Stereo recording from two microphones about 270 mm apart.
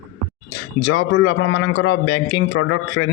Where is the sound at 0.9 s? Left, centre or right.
Left.